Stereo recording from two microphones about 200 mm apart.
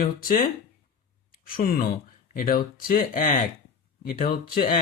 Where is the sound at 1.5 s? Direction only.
45° left (ahead or behind).